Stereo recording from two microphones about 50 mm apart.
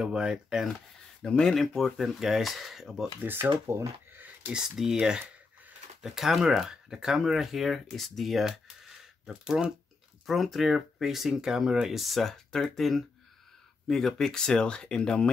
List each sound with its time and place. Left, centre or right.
0.0 s speech: centre
1.2 s speech: centre
1.8 s speech: centre
3.2 s speech: right
3.6 s speech: right
4.5 s speech: centre
9.2 s speech: centre
10.2 s speech: centre